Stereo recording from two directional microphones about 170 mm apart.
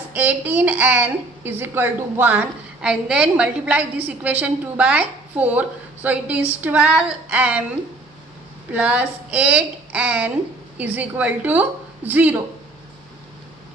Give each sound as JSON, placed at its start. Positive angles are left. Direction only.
{"t": 0.1, "sound": "a child's voice", "side_deg": -10}
{"t": 8.7, "sound": "a child's voice", "side_deg": -10}